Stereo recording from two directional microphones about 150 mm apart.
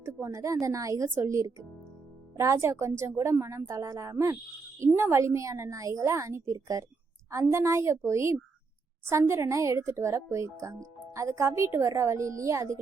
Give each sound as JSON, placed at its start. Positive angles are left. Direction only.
{"t": 0.0, "sound": "speech", "side_deg": -20}